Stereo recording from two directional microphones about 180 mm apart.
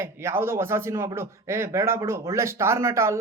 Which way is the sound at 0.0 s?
15° right (ahead or behind).